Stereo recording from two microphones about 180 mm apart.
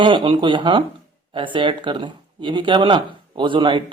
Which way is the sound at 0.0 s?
25° right (ahead or behind).